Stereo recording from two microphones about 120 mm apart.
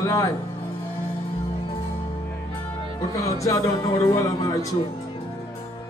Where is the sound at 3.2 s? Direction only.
30° left (ahead or behind).